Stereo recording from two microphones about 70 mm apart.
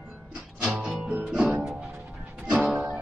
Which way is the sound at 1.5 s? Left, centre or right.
Centre.